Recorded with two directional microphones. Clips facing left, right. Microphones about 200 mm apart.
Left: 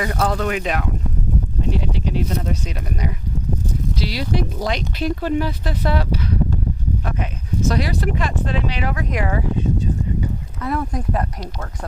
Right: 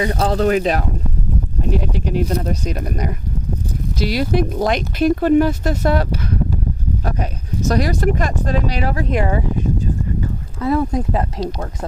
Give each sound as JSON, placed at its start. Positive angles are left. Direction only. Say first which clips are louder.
{"t": 0.0, "sound": "speech", "louder": "right 4 dB", "side_deg": -25}
{"t": 1.7, "sound": "speech", "louder": "right 5 dB", "side_deg": -45}
{"t": 7.7, "sound": "speech", "louder": "right 6 dB", "side_deg": -45}
{"t": 10.6, "sound": "speech", "louder": "right 6 dB", "side_deg": -25}